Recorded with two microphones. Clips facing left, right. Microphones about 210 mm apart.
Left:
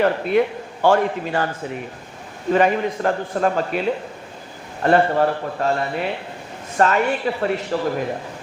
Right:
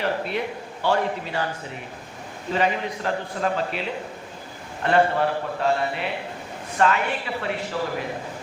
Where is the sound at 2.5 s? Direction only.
50° left (ahead or behind).